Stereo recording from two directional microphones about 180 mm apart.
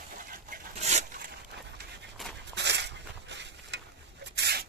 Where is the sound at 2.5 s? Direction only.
70° right (ahead or behind).